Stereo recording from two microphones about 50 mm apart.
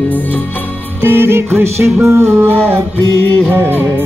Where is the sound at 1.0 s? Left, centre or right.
Right.